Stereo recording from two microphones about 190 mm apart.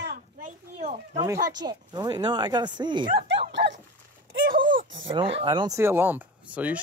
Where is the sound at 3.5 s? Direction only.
70° right (ahead or behind).